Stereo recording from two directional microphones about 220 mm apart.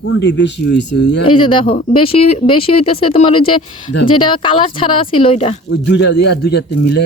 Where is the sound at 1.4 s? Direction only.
25° left (ahead or behind).